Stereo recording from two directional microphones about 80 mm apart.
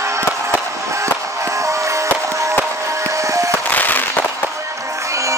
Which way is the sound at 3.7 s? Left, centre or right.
Left.